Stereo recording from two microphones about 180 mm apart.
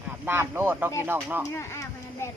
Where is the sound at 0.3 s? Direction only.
10° right (ahead or behind).